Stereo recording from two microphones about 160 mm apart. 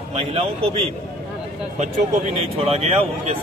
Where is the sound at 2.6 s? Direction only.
40° right (ahead or behind).